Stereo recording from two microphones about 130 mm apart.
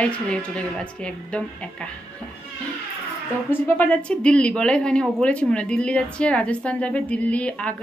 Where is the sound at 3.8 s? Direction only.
10° left (ahead or behind).